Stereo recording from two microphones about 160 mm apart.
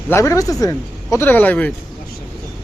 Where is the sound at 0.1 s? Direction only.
15° left (ahead or behind).